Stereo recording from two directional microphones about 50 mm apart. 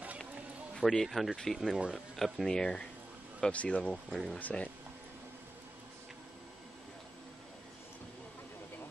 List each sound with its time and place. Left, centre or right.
0.7 s speech: centre
2.5 s speech: centre
3.5 s speech: left
3.9 s speech: centre
4.4 s speech: left